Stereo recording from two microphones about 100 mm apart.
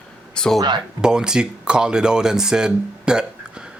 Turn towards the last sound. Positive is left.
turn(degrees=-10)  # may be behind; listen again after turning